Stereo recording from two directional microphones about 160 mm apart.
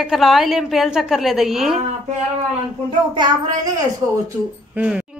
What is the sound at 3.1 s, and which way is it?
Speech, 25° right (ahead or behind).